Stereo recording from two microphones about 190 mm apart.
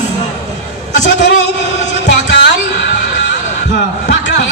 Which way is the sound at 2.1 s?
65° left (ahead or behind).